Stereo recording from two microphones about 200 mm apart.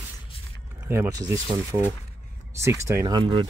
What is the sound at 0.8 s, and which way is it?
Speech, 15° right (ahead or behind).